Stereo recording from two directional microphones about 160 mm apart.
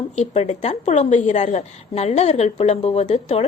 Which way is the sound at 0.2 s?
40° left (ahead or behind).